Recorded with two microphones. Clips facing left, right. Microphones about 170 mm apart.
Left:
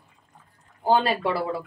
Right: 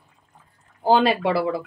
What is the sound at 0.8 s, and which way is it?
Speech, 90° right.